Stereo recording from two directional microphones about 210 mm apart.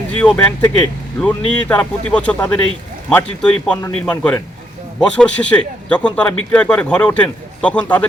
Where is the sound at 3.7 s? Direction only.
15° left (ahead or behind).